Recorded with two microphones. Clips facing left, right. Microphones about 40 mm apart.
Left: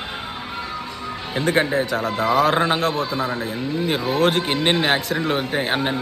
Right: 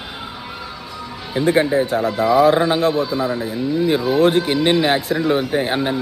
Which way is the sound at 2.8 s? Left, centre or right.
Left.